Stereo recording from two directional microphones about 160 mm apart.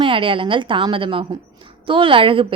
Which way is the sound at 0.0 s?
35° right (ahead or behind).